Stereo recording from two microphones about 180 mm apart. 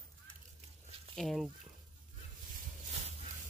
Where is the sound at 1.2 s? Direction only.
Centre (ahead or behind).